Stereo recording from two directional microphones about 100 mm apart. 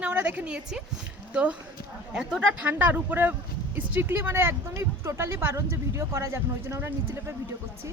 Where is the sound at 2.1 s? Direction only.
10° right (ahead or behind); by 7.3 s 25° right (ahead or behind).